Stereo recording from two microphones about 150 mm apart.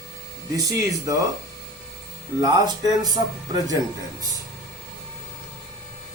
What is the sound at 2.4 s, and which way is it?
Speech, 25° right (ahead or behind).